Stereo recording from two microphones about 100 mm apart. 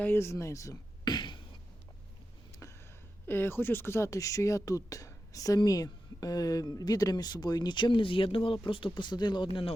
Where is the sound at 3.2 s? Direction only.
20° left (ahead or behind); by 9.4 s 50° left (ahead or behind).